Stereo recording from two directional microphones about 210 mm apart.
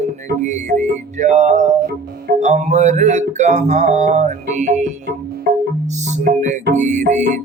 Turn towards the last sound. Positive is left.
turn(degrees=-35)  # may be behind; listen again after turning